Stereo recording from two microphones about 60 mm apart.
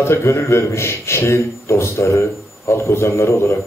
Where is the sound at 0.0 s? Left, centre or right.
Left.